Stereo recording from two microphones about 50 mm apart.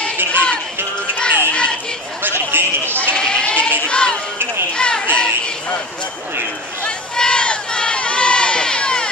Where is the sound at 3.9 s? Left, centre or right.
Centre.